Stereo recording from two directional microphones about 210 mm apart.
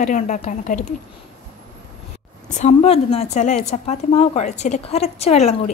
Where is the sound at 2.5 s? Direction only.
30° left (ahead or behind).